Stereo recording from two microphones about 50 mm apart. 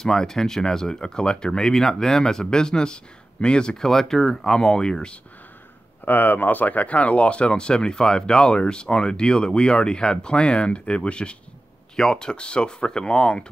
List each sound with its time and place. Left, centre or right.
0.0 s speech: centre
6.0 s speech: left; by 13.5 s centre